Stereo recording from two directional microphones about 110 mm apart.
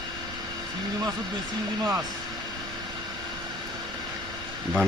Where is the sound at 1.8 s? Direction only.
30° right (ahead or behind).